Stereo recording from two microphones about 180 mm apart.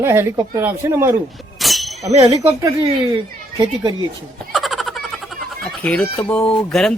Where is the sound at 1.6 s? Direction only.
Centre (ahead or behind).